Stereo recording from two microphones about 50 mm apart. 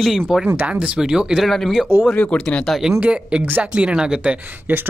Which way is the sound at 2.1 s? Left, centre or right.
Left.